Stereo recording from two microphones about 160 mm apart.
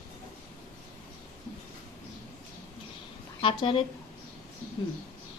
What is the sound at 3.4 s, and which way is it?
Speech, 30° left (ahead or behind).